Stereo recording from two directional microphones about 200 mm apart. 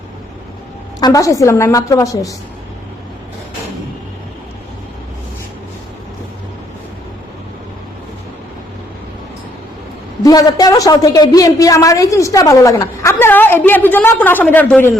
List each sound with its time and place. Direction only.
0.9 s a woman's voice: 20° left (ahead or behind)
10.2 s a woman's voice: 20° left (ahead or behind)